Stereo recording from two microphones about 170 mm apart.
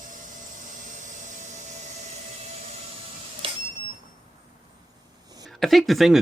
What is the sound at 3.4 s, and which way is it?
Cash register, 30° right (ahead or behind).